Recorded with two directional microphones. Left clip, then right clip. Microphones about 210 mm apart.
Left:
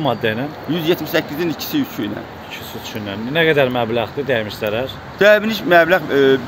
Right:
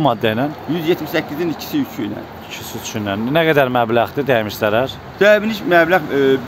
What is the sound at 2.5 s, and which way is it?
Speech, 30° right (ahead or behind).